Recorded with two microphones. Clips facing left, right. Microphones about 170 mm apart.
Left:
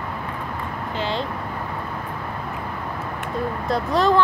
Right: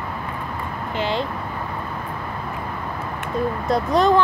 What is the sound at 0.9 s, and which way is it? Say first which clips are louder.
Speech: right 3 dB; 15° right (ahead or behind).